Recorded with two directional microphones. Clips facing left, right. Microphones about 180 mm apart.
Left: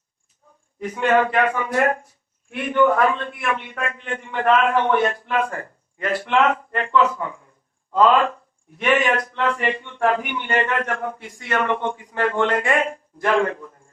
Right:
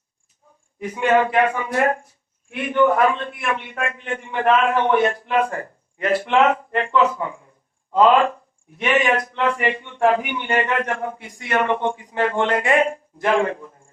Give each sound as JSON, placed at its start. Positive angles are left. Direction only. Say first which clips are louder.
{"t": 0.8, "sound": "a man's voice", "louder": "right 1 dB", "side_deg": -15}